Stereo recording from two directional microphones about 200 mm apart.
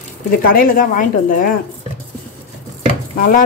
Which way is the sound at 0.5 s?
45° left (ahead or behind).